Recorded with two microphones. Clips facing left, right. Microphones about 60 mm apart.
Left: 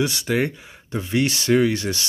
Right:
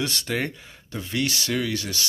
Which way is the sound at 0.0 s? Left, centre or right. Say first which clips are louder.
Left 5 dB; centre.